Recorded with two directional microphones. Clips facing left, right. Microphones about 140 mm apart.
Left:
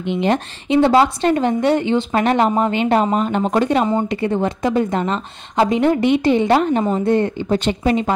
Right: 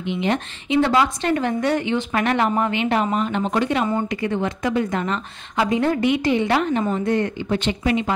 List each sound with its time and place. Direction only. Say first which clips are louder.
0.0 s a woman's voice: left 4 dB; 40° left (ahead or behind); by 2.7 s 25° left (ahead or behind)
2.7 s a woman's voice: left 4 dB; 35° left (ahead or behind)
3.8 s speech: left 4 dB; 25° left (ahead or behind)
7.3 s a woman's voice: left 4 dB; 40° left (ahead or behind)